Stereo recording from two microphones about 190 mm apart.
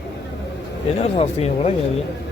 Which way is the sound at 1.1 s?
30° left (ahead or behind).